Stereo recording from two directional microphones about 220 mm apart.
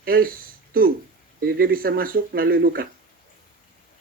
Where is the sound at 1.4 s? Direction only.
45° right (ahead or behind).